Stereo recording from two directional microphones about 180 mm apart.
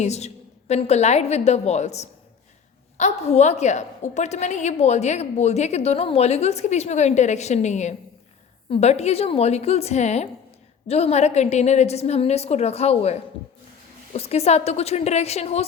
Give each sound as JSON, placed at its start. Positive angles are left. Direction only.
{"t": 0.0, "sound": "a woman's voice", "side_deg": 35}